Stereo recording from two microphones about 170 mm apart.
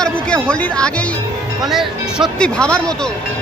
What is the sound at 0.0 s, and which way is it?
Speech, 5° left (ahead or behind).